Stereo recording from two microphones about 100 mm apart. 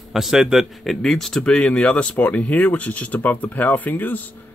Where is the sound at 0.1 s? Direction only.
5° right (ahead or behind).